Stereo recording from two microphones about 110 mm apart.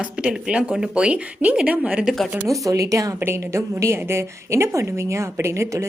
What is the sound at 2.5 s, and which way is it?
A woman's voice, 30° right (ahead or behind).